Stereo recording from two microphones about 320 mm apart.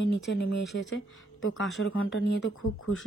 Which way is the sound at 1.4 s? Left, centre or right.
Left.